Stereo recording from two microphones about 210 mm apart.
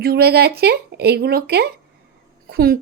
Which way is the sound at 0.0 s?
50° right (ahead or behind).